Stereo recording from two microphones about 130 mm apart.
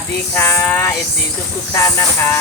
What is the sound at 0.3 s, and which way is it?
Speech, 15° left (ahead or behind).